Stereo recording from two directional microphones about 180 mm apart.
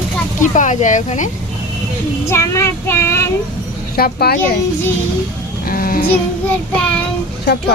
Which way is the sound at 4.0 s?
60° left (ahead or behind).